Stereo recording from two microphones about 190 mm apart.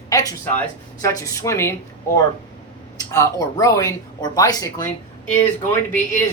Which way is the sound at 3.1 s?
15° left (ahead or behind).